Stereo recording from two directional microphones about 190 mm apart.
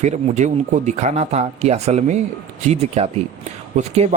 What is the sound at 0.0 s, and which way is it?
Speech, 40° right (ahead or behind).